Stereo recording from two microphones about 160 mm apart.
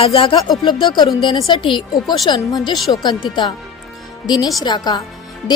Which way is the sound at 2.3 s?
20° left (ahead or behind).